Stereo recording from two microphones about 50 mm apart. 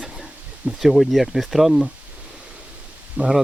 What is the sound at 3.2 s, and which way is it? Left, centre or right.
Speech, right.